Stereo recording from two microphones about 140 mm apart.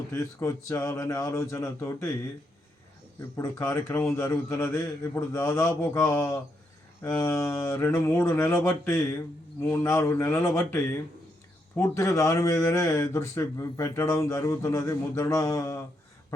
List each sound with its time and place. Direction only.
0.1 s speech: 20° left (ahead or behind)
3.3 s speech: 15° left (ahead or behind)